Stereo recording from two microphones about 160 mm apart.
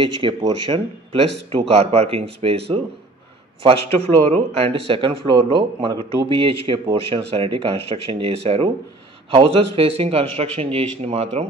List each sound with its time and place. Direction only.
0.0 s speech: 30° right (ahead or behind)
3.6 s speech: 35° right (ahead or behind)